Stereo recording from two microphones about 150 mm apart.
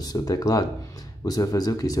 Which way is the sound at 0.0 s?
25° left (ahead or behind).